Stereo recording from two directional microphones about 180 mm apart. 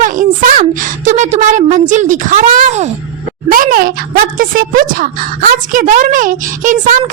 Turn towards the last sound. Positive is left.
turn(degrees=-45)  # may be behind; listen again after turning